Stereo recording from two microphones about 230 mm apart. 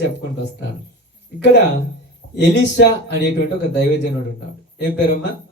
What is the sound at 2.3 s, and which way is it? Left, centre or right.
Speech, left.